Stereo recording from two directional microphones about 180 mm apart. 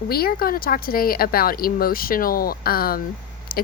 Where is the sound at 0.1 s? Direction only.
55° left (ahead or behind).